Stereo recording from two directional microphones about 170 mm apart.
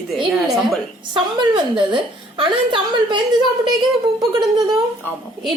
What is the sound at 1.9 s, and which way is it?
A woman's voice, 30° right (ahead or behind).